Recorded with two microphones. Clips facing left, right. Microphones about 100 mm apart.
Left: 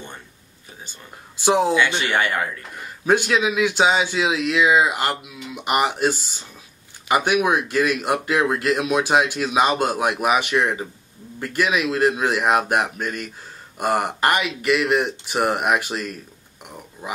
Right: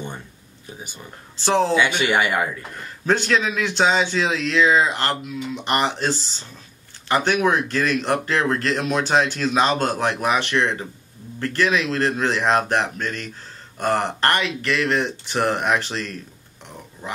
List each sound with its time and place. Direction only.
1.4 s speech: 15° left (ahead or behind)
1.8 s speech: 15° right (ahead or behind)
2.7 s speech: 10° left (ahead or behind)